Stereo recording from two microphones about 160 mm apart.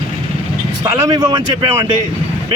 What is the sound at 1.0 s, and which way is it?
Speech, 25° right (ahead or behind).